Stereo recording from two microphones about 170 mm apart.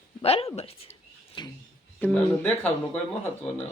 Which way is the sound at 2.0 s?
10° left (ahead or behind).